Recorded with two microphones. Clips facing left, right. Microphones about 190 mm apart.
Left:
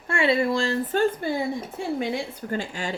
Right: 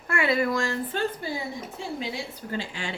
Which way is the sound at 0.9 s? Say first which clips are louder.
Left 6 dB; 45° left (ahead or behind).